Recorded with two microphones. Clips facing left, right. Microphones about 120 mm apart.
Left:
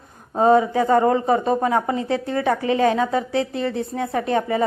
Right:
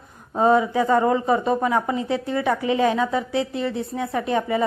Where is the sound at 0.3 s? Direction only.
35° left (ahead or behind).